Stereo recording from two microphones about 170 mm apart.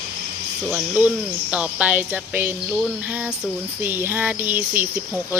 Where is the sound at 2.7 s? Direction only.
5° right (ahead or behind).